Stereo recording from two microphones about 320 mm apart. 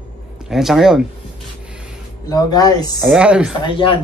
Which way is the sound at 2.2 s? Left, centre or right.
Centre.